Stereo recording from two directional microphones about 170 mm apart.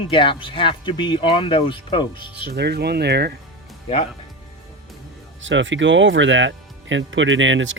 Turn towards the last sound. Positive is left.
turn(degrees=-90)